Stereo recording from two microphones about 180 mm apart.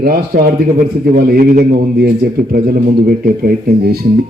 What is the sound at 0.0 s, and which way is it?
A man's voice, 55° right (ahead or behind).